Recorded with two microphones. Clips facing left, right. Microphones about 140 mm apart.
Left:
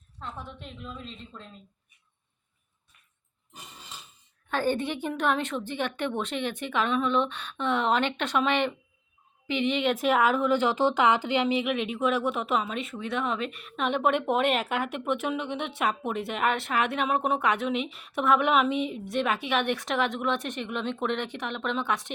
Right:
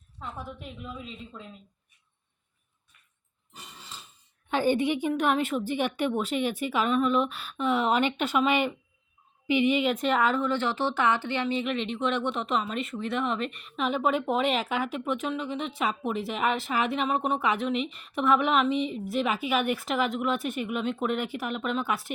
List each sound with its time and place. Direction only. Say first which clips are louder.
0.2 s a woman's voice: right 1 dB; 5° right (ahead or behind)
4.4 s a woman's voice: right 3 dB; 15° right (ahead or behind)